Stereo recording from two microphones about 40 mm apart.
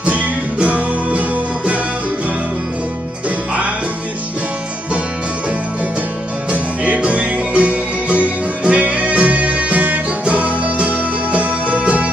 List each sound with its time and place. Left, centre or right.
0.0 s music: right
3.3 s music: right
6.5 s music: right